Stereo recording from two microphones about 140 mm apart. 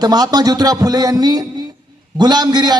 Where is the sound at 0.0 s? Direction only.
25° right (ahead or behind).